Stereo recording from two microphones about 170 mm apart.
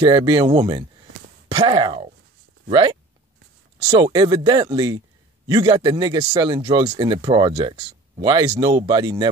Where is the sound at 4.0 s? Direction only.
25° right (ahead or behind).